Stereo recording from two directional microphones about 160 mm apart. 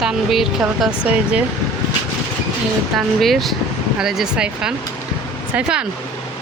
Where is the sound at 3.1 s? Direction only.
Centre (ahead or behind).